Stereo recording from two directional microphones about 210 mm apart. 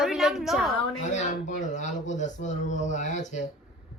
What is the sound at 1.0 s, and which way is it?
Speech, 35° left (ahead or behind).